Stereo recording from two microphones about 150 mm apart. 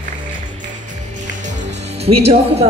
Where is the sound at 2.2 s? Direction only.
45° right (ahead or behind).